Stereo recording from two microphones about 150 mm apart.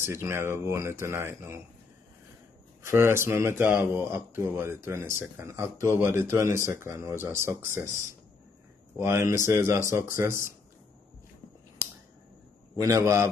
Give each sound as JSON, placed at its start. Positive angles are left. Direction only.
{"t": 0.0, "sound": "speech", "side_deg": -15}
{"t": 2.8, "sound": "speech", "side_deg": -15}
{"t": 9.0, "sound": "speech", "side_deg": -15}
{"t": 12.7, "sound": "a man's voice", "side_deg": -20}